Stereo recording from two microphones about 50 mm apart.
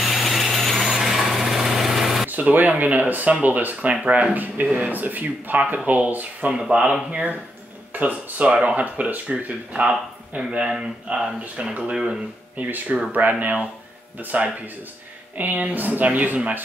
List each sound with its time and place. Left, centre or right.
0.0 s vehicle: centre
2.2 s a sound: right
2.8 s speech: right
3.9 s speech: right
6.5 s speech: centre
12.5 s speech: right